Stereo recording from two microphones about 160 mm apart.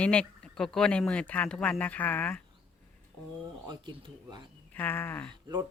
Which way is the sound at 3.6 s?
30° right (ahead or behind).